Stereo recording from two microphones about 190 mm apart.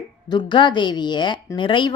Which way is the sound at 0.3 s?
25° left (ahead or behind).